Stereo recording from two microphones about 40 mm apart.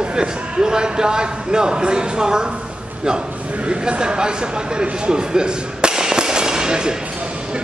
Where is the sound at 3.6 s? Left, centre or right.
Right.